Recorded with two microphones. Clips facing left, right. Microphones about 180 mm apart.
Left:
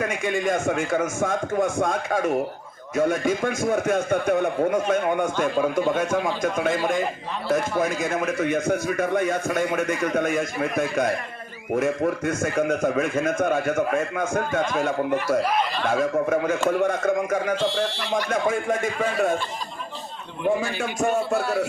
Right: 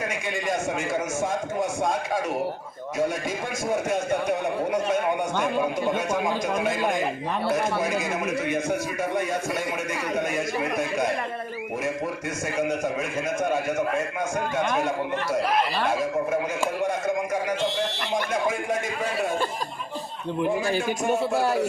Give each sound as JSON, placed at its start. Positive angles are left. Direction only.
{"t": 0.0, "sound": "a man's voice", "side_deg": 55}
{"t": 11.8, "sound": "a man's voice", "side_deg": 50}
{"t": 16.3, "sound": "a man's voice", "side_deg": 55}
{"t": 18.3, "sound": "a man's voice", "side_deg": 50}
{"t": 20.7, "sound": "a man's voice", "side_deg": -40}